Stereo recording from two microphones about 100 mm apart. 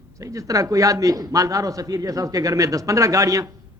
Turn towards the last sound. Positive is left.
turn(degrees=-35)  # may be behind; listen again after turning